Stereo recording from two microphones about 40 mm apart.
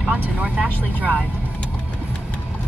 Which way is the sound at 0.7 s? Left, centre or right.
Left.